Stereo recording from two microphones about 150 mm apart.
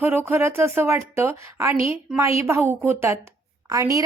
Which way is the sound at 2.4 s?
15° right (ahead or behind).